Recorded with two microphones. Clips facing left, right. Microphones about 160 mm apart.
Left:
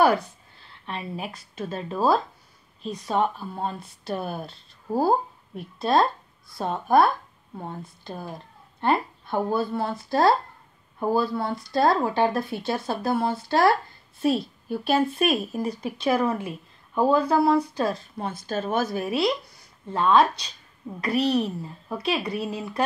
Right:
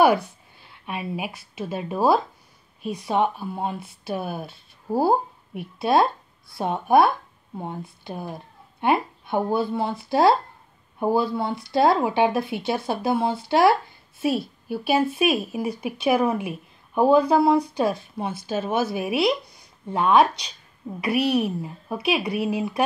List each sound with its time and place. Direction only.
0.0 s a woman's voice: 10° right (ahead or behind)